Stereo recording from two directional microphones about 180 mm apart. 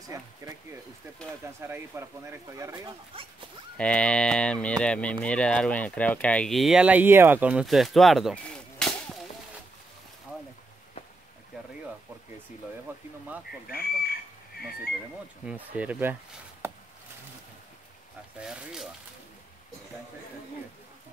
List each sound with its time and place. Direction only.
0.1 s speech: 15° right (ahead or behind)
1.4 s speech: 15° right (ahead or behind)
3.1 s speech: 30° right (ahead or behind)
3.7 s speech: 5° left (ahead or behind)
12.9 s speech: 10° right (ahead or behind)
13.7 s chicken: 55° left (ahead or behind)
15.4 s speech: 10° right (ahead or behind)
18.4 s speech: 5° right (ahead or behind)